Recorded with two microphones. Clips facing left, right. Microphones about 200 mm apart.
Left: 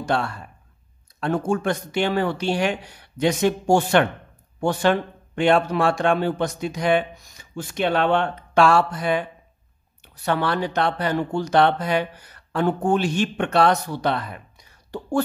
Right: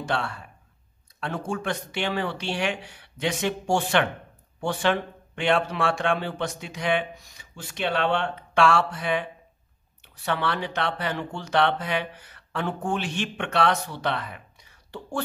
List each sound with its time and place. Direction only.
0.0 s speech: 45° left (ahead or behind)